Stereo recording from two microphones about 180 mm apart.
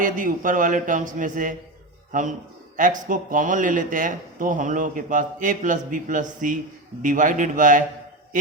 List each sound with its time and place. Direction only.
0.0 s a man's voice: 50° right (ahead or behind)